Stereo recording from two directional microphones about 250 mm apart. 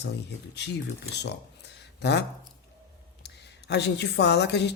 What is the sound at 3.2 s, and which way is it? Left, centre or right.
A woman's voice, left.